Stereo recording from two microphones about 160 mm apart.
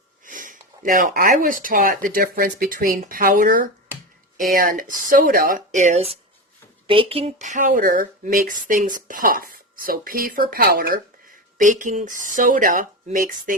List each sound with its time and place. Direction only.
0.3 s speech: 55° right (ahead or behind)
11.5 s speech: 55° right (ahead or behind)